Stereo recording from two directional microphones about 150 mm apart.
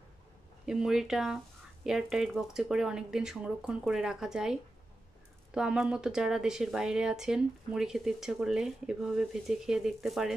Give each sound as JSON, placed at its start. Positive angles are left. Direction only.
{"t": 0.7, "sound": "a woman's voice", "side_deg": -5}